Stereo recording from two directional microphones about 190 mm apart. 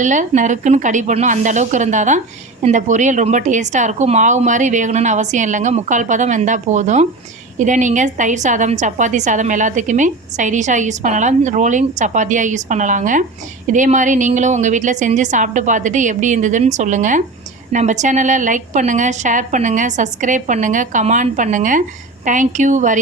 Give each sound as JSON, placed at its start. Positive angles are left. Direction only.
{"t": 0.0, "sound": "a woman's voice", "side_deg": -40}